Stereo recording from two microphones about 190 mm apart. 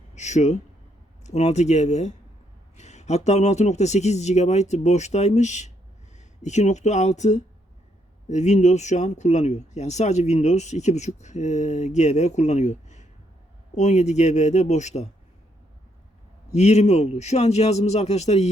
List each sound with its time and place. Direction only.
0.1 s speech: 35° left (ahead or behind)
16.6 s speech: 35° left (ahead or behind)